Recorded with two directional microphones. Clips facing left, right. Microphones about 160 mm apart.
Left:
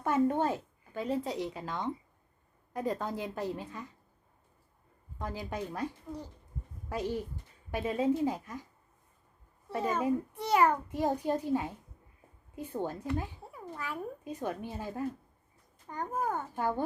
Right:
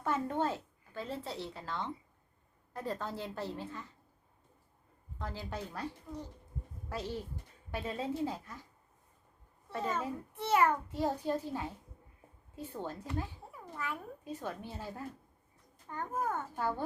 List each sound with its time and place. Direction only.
0.0 s a child's voice: 15° left (ahead or behind)
5.2 s a child's voice: 15° left (ahead or behind)
9.7 s a child's voice: 10° left (ahead or behind)